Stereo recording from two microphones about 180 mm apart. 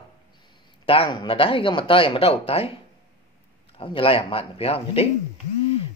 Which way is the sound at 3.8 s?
30° left (ahead or behind).